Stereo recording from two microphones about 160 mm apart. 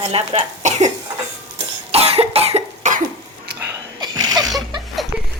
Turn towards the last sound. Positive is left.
turn(degrees=-25)  # may be behind; listen again after turning